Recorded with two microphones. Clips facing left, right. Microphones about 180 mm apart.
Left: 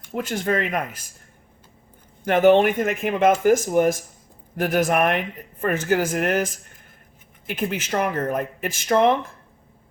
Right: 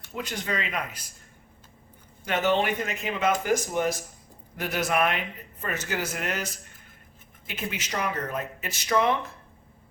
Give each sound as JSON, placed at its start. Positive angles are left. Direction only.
{"t": 0.1, "sound": "speech", "side_deg": 50}
{"t": 2.2, "sound": "speech", "side_deg": 55}